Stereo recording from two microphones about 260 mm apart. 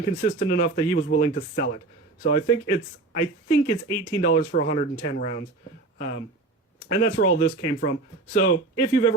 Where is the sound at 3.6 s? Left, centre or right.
Centre.